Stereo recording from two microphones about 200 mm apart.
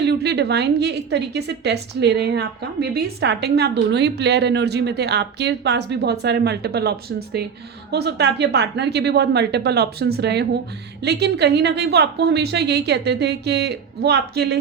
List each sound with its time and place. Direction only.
0.0 s a woman's voice: 55° right (ahead or behind)